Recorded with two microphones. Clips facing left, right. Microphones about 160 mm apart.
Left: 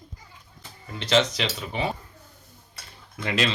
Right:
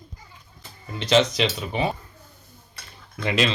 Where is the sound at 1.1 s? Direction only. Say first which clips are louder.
Right 3 dB; 15° right (ahead or behind).